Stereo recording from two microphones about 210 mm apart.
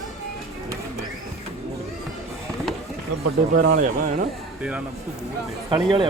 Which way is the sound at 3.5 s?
40° right (ahead or behind).